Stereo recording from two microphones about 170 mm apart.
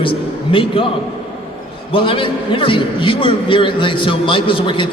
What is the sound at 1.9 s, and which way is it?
A man's voice, 30° left (ahead or behind).